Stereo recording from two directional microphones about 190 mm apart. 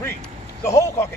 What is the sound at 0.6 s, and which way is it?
Speech, 15° left (ahead or behind).